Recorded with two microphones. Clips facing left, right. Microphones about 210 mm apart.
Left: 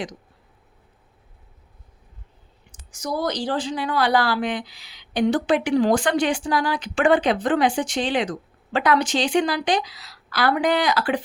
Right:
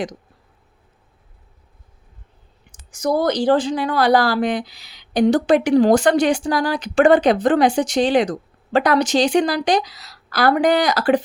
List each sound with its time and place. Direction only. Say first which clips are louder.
2.9 s a woman's voice: right 7 dB; 55° right (ahead or behind)